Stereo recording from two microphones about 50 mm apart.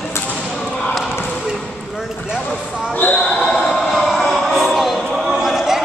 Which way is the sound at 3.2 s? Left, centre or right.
Centre.